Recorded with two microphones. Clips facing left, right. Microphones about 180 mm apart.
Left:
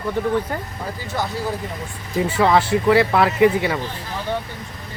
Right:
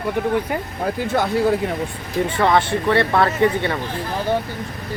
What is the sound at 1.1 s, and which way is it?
Speech, 60° right (ahead or behind).